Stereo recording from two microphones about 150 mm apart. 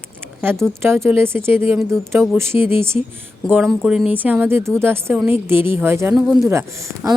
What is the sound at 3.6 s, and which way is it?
Speech, centre (ahead or behind).